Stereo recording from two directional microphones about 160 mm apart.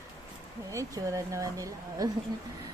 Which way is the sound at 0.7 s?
20° right (ahead or behind).